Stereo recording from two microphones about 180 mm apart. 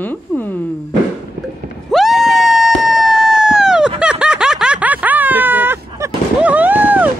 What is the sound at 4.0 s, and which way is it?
Snicker, 5° right (ahead or behind).